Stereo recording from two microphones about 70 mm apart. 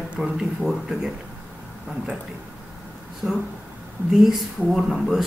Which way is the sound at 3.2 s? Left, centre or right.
Centre.